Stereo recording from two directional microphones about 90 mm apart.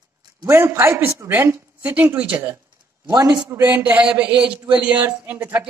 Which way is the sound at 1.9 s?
20° right (ahead or behind).